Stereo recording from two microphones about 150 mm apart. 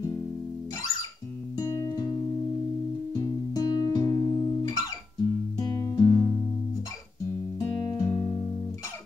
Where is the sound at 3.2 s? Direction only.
25° left (ahead or behind).